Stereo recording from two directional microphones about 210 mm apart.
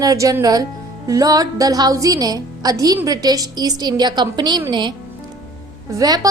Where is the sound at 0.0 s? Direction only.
15° right (ahead or behind).